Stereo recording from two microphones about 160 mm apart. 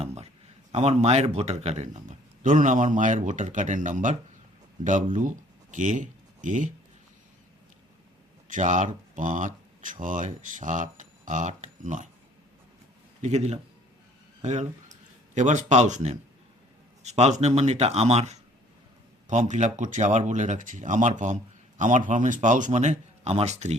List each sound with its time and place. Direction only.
0.7 s speech: 45° right (ahead or behind)
8.4 s speech: 50° right (ahead or behind)
13.2 s speech: 45° right (ahead or behind)